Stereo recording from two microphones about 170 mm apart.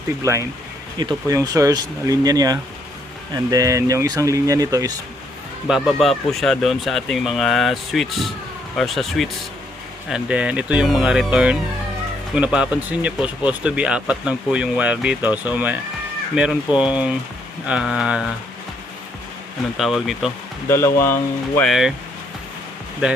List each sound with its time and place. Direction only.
0.2 s speech: 20° right (ahead or behind)
5.6 s speech: 5° right (ahead or behind)
19.7 s speech: centre (ahead or behind)
20.7 s speech: 15° left (ahead or behind)
21.7 s speech: centre (ahead or behind)